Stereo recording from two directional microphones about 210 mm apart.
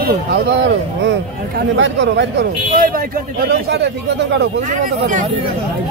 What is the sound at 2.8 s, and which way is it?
A man's voice, 45° right (ahead or behind).